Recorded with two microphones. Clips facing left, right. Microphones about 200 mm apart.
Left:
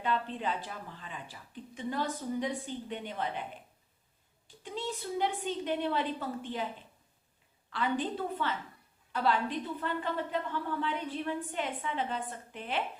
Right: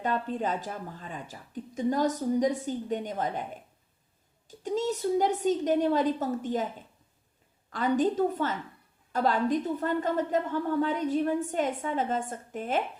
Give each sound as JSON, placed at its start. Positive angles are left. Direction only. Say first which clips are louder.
{"t": 0.0, "sound": "a woman's voice", "louder": "right 4 dB", "side_deg": -45}